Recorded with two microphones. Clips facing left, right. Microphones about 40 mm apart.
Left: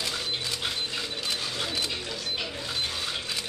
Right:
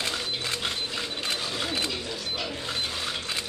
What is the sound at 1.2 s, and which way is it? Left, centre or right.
Camera, right.